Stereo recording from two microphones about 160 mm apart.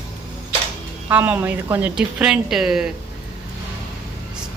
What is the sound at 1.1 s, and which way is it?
Speech, 10° right (ahead or behind).